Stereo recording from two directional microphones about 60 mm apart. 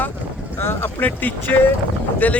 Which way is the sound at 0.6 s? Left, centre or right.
Left.